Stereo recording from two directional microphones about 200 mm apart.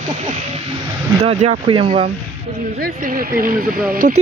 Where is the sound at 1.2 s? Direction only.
35° right (ahead or behind).